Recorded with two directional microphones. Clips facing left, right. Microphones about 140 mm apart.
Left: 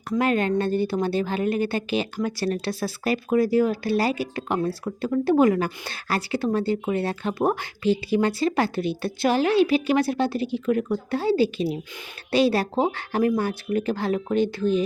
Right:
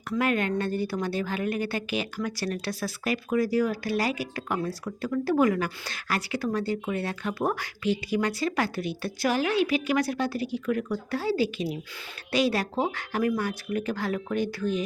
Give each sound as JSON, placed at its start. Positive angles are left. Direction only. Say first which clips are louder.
{"t": 0.2, "sound": "a woman's voice", "louder": "left 4 dB", "side_deg": 30}